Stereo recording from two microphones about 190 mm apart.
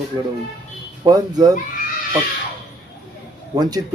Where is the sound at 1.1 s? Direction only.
20° right (ahead or behind).